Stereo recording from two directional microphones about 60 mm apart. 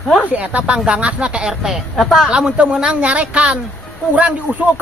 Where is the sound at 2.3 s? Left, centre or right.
Centre.